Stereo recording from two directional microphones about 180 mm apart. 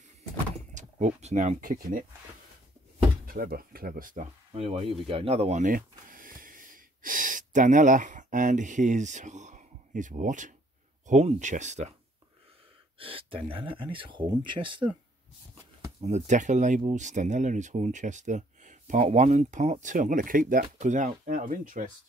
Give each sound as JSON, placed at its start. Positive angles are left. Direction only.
{"t": 0.7, "sound": "speech", "side_deg": -40}
{"t": 3.3, "sound": "speech", "side_deg": -55}
{"t": 4.6, "sound": "speech", "side_deg": -35}
{"t": 13.0, "sound": "speech", "side_deg": -30}
{"t": 16.0, "sound": "speech", "side_deg": -40}